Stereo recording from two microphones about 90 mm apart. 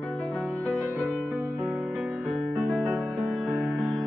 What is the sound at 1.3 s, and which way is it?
Music, 10° right (ahead or behind).